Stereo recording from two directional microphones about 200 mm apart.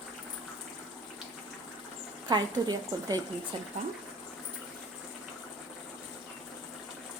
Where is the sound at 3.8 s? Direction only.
35° right (ahead or behind).